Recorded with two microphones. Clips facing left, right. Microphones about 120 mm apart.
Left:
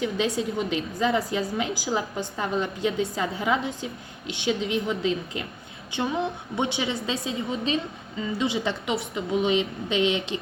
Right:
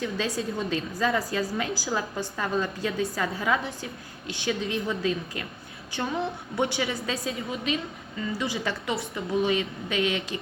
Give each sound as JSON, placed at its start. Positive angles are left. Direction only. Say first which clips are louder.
{"t": 0.0, "sound": "a woman's voice", "louder": "left 3 dB", "side_deg": 20}